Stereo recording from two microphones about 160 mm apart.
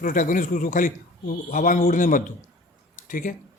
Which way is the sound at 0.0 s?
55° left (ahead or behind).